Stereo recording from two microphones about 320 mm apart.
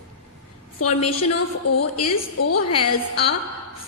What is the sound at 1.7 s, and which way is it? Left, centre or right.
A woman's voice, left.